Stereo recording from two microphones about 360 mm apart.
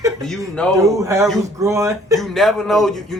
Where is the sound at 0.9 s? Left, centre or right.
Centre.